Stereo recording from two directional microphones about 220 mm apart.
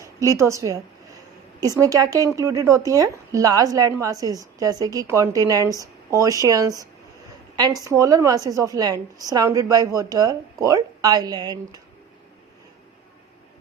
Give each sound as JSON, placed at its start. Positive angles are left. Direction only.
{"t": 0.0, "sound": "a woman's voice", "side_deg": -15}
{"t": 7.9, "sound": "a woman's voice", "side_deg": -15}